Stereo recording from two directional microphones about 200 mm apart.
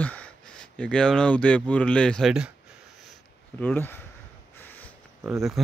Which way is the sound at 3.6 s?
10° left (ahead or behind).